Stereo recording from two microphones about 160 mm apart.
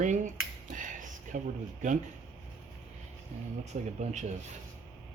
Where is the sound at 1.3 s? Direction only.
55° right (ahead or behind).